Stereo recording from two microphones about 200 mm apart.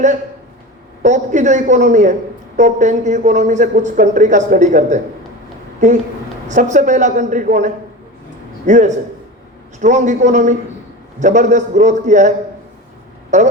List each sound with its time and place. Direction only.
1.0 s speech: 35° right (ahead or behind)
6.5 s speech: 40° right (ahead or behind)
13.3 s speech: 35° right (ahead or behind)